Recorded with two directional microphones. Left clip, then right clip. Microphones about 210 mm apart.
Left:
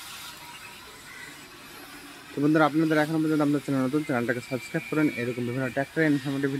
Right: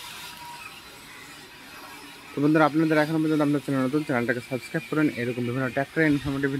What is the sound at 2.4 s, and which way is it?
Speech, 5° right (ahead or behind).